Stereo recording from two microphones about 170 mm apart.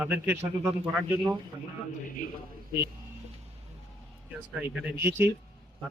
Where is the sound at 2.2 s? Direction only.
50° left (ahead or behind).